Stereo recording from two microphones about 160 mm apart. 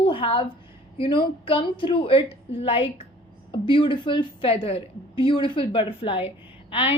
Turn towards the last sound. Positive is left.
turn(degrees=35)  # may be behind; listen again after turning